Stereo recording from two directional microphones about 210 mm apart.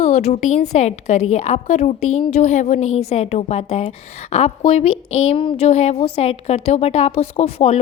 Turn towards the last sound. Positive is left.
turn(degrees=30)  # may be behind; listen again after turning